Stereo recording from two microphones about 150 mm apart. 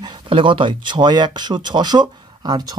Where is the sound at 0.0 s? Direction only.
30° right (ahead or behind).